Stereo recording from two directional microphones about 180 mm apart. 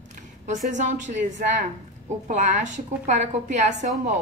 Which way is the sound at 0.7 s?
40° right (ahead or behind).